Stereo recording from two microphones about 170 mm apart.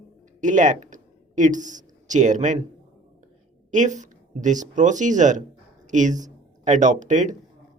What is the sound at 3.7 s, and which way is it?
A woman's voice, 45° right (ahead or behind).